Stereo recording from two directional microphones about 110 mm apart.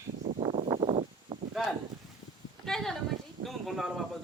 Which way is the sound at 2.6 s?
5° left (ahead or behind).